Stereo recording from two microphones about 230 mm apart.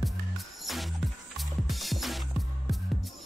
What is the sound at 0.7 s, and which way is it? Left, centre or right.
Music, centre.